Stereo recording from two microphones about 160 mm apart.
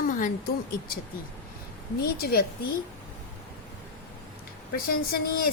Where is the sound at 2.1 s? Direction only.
70° left (ahead or behind).